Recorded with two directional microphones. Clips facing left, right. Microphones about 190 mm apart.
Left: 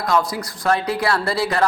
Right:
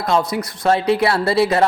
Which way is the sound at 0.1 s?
20° right (ahead or behind).